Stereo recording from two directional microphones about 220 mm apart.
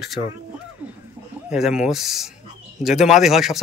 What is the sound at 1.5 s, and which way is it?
A man's voice, 5° right (ahead or behind).